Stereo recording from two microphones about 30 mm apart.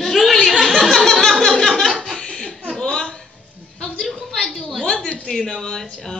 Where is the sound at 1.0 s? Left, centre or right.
Centre.